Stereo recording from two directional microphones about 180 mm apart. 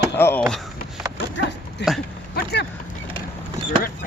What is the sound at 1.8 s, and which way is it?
Speech, 70° left (ahead or behind).